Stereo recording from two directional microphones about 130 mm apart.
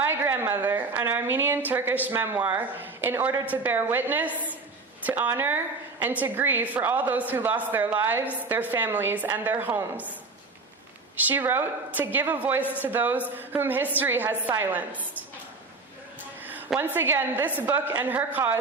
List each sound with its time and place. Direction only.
0.0 s a woman's voice: 15° right (ahead or behind)
11.2 s a woman's voice: 15° right (ahead or behind)
16.6 s a woman's voice: 10° right (ahead or behind)